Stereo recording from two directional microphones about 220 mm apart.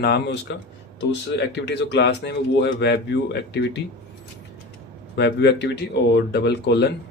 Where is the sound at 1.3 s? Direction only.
50° left (ahead or behind).